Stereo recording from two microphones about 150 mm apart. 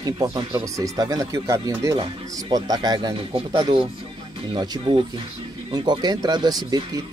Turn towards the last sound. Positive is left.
turn(degrees=-25)  # may be behind; listen again after turning